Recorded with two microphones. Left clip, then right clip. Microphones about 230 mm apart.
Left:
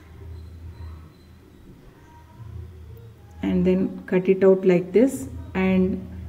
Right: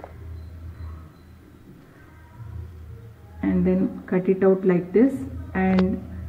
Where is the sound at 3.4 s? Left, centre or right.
Left.